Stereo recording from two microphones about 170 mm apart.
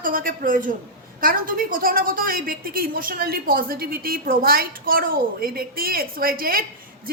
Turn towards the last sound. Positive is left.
turn(degrees=-60)  # may be behind; listen again after turning